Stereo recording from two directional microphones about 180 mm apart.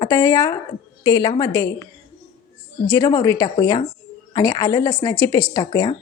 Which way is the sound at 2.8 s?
20° left (ahead or behind).